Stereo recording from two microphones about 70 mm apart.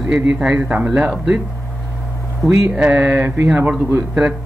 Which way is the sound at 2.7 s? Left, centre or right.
Centre.